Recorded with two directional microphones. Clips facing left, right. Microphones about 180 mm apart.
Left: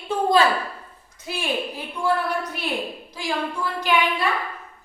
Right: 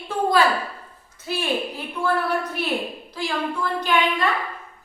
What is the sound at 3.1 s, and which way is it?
Speech, 15° left (ahead or behind).